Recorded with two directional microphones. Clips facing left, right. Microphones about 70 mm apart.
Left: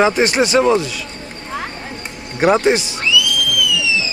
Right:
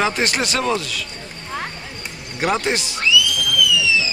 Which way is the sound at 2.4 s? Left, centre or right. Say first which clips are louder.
Left 7 dB; left.